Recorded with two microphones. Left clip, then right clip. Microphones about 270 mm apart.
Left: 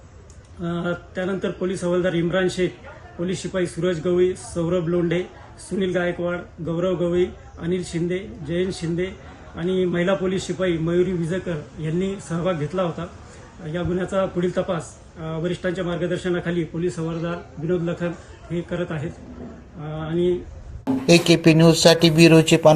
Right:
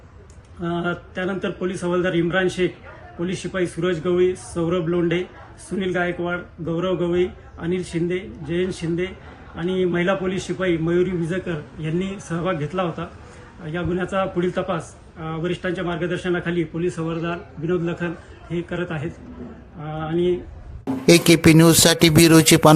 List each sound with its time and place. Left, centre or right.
0.6 s a man's voice: centre
19.9 s a sound: centre
21.2 s a man's voice: right